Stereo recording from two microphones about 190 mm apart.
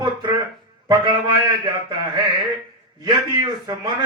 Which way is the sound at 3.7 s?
25° right (ahead or behind).